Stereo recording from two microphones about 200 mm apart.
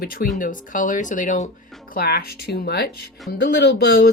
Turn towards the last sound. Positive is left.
turn(degrees=60)  # may be behind; listen again after turning